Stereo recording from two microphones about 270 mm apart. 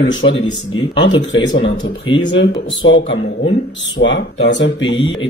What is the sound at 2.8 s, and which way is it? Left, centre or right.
Speech, left.